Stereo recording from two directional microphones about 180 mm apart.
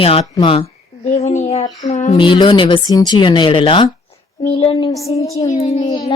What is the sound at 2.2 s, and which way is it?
Speech, 25° left (ahead or behind).